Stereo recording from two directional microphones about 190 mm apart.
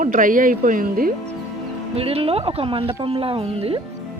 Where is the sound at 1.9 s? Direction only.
30° right (ahead or behind).